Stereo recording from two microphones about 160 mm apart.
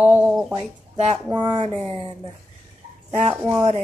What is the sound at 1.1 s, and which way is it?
Speech, 25° right (ahead or behind).